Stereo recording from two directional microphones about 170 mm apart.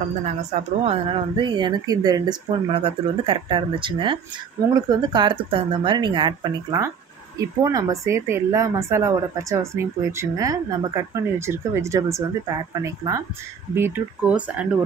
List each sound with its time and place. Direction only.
0.2 s speech: 40° right (ahead or behind); by 14.7 s 5° right (ahead or behind)